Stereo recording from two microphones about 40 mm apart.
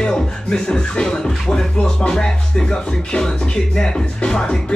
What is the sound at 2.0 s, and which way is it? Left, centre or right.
Music, centre.